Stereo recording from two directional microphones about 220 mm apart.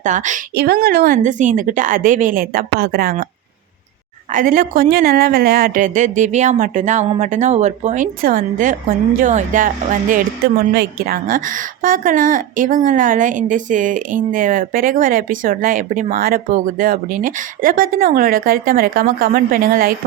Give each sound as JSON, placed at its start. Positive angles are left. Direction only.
{"t": 0.0, "sound": "a woman's voice", "side_deg": -35}
{"t": 4.3, "sound": "a woman's voice", "side_deg": -40}